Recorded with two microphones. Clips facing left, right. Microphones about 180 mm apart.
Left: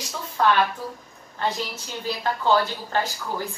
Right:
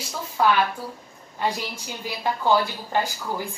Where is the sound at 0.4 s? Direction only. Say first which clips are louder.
Even; 5° right (ahead or behind).